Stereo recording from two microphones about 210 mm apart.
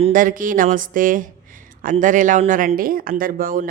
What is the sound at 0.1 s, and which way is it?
Speech, 40° right (ahead or behind).